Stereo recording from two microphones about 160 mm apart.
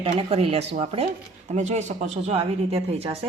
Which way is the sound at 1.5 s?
45° right (ahead or behind).